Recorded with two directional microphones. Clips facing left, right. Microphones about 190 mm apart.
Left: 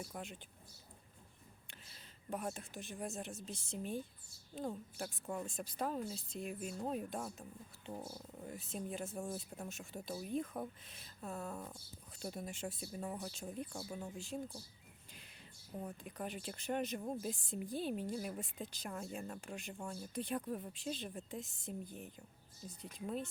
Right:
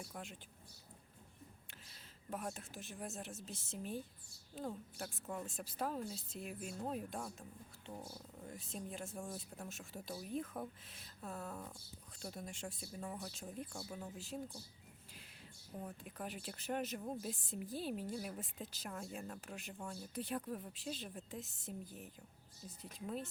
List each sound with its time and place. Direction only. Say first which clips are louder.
0.0 s speech: left 3 dB; centre (ahead or behind)
1.9 s speech: left 3 dB; centre (ahead or behind)
7.9 s speech: left 3 dB; 20° left (ahead or behind)
8.4 s speech: left 4 dB; 5° left (ahead or behind)
15.8 s speech: left 2 dB; centre (ahead or behind)
17.0 s a woman's voice: left 2 dB; 10° left (ahead or behind)
17.2 s speech: left 3 dB; 5° right (ahead or behind)